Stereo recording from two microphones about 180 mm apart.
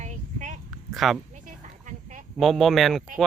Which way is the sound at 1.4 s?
45° right (ahead or behind).